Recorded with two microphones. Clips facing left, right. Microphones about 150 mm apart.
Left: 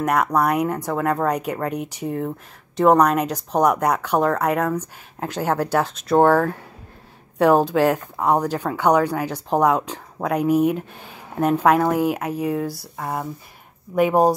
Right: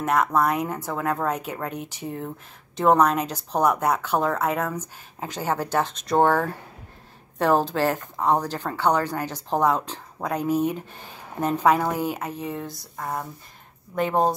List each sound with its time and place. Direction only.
0.0 s speech: centre (ahead or behind)
3.8 s speech: 5° right (ahead or behind)
5.6 s speech: 10° left (ahead or behind)